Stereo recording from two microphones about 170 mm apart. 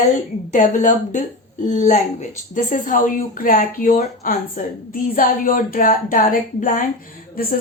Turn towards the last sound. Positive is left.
turn(degrees=55)  # may be behind; listen again after turning